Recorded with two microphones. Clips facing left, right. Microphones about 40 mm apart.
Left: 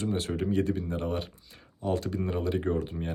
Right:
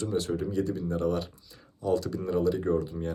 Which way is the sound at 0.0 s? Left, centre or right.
Left.